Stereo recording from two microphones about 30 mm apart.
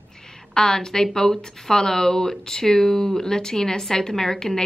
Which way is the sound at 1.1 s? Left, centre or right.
Centre.